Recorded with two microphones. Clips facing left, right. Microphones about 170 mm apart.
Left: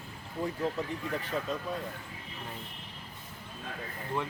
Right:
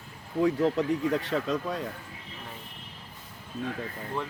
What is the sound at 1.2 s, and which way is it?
Speech, 90° right.